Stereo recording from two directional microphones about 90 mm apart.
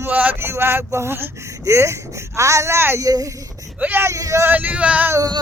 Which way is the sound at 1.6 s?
30° right (ahead or behind).